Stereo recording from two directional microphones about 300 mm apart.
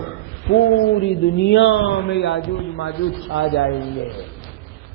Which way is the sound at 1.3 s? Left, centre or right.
Left.